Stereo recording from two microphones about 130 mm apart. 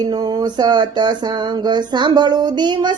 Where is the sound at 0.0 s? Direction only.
30° right (ahead or behind).